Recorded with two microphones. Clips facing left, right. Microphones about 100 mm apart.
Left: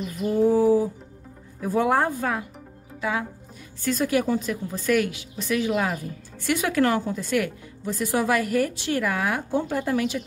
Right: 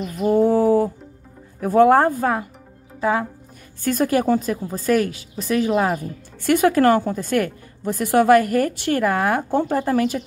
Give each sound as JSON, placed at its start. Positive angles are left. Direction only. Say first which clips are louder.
{"t": 0.2, "sound": "a sound", "louder": "right 3 dB", "side_deg": -60}
{"t": 1.6, "sound": "a woman's voice", "louder": "right 8 dB", "side_deg": -55}
{"t": 6.4, "sound": "a woman's voice", "louder": "right 7 dB", "side_deg": -45}